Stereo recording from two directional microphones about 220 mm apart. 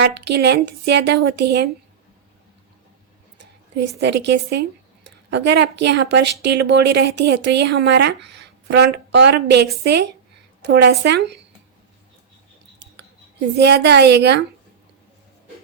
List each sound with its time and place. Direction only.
0.0 s speech: 50° right (ahead or behind)
3.3 s a woman's voice: 50° right (ahead or behind)
13.6 s speech: 50° right (ahead or behind)